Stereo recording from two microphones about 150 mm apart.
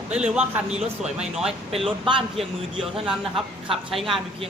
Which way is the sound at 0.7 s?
45° right (ahead or behind).